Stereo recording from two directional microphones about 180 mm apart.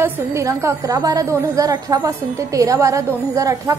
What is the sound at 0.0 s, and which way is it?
A woman's voice, 15° right (ahead or behind).